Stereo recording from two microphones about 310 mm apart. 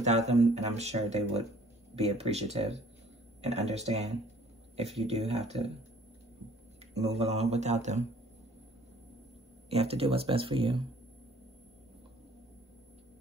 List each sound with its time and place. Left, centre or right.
0.0 s speech: right
6.9 s speech: right
9.7 s speech: centre